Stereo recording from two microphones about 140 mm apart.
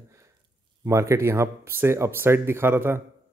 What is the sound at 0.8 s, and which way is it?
Speech, 20° right (ahead or behind).